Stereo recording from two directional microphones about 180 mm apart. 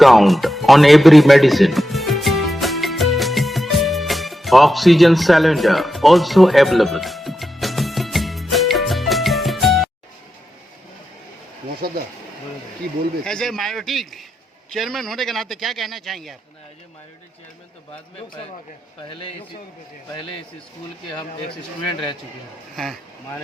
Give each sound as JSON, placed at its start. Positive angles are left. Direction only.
{"t": 0.0, "sound": "music", "side_deg": 0}
{"t": 11.8, "sound": "a sound", "side_deg": -60}
{"t": 13.2, "sound": "speech", "side_deg": 0}
{"t": 22.7, "sound": "speech", "side_deg": 0}